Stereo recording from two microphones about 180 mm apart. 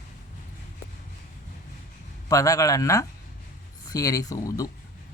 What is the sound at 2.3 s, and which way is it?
Speech, 20° left (ahead or behind).